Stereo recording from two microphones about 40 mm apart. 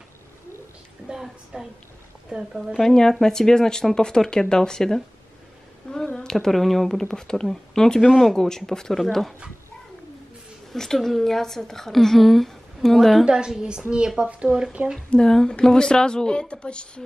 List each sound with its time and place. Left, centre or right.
1.0 s a woman's voice: centre
2.8 s a woman's voice: centre
6.1 s a woman's voice: centre
8.0 s speech: centre
8.5 s a woman's voice: centre
9.0 s speech: centre
10.7 s a woman's voice: centre
13.2 s a woman's voice: right
15.0 s a woman's voice: centre